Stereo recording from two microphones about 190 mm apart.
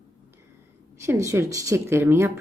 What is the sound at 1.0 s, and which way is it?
A woman's voice, 15° right (ahead or behind).